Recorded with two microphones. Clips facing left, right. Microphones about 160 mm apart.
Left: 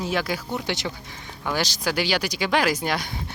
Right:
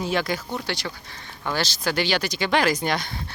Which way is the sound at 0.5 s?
20° left (ahead or behind).